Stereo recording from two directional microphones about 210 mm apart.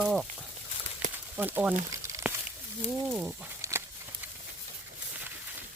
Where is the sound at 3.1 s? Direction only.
5° right (ahead or behind).